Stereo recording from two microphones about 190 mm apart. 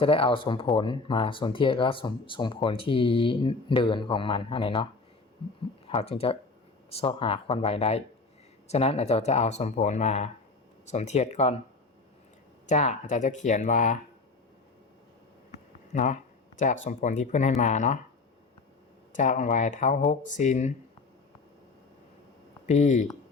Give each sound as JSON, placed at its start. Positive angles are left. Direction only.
{"t": 0.0, "sound": "speech", "side_deg": 30}
{"t": 5.9, "sound": "speech", "side_deg": 30}
{"t": 12.6, "sound": "speech", "side_deg": 40}
{"t": 15.9, "sound": "speech", "side_deg": 40}
{"t": 19.1, "sound": "speech", "side_deg": 40}
{"t": 22.6, "sound": "speech", "side_deg": 40}